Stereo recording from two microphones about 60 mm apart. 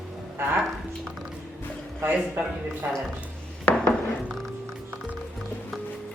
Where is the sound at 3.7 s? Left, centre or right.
Left.